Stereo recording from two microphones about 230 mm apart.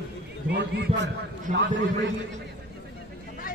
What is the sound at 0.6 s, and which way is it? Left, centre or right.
A man's voice, right.